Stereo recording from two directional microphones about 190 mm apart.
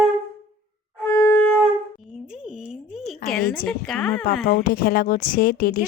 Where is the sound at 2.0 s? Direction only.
Centre (ahead or behind).